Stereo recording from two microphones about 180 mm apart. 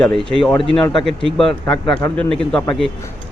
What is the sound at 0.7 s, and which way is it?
Speech, 25° left (ahead or behind).